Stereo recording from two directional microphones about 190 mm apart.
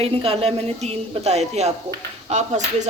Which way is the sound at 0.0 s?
30° right (ahead or behind).